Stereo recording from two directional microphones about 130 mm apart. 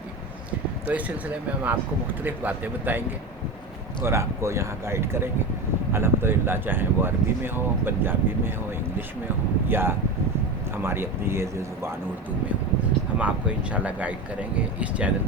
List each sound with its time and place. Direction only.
0.9 s speech: 10° right (ahead or behind)
4.0 s speech: 20° right (ahead or behind)
9.6 s speech: 15° right (ahead or behind)
13.1 s speech: 10° right (ahead or behind)